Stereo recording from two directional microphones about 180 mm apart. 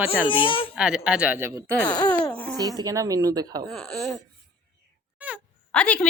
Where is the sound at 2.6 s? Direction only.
20° right (ahead or behind).